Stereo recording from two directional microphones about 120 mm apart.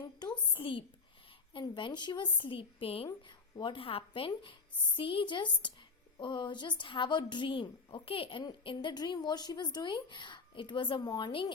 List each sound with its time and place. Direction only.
0.2 s a woman's voice: 40° left (ahead or behind)